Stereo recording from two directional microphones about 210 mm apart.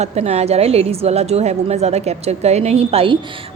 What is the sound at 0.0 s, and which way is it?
A woman's voice, 30° right (ahead or behind).